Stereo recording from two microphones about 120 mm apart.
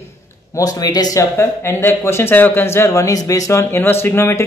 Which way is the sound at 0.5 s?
30° left (ahead or behind).